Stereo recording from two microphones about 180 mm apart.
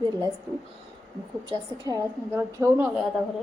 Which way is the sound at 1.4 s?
15° right (ahead or behind).